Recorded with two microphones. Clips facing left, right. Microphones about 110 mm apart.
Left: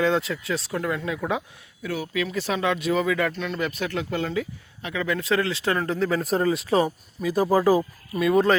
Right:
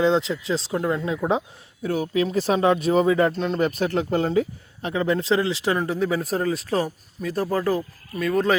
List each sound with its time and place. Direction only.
0.0 s speech: 25° right (ahead or behind)
1.8 s speech: 40° right (ahead or behind); by 8.4 s 5° left (ahead or behind)